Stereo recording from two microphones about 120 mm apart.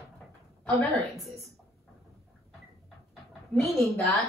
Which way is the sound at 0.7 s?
15° left (ahead or behind).